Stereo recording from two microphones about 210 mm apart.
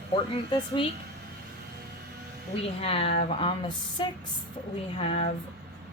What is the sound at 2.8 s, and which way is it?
A woman's voice, 30° left (ahead or behind).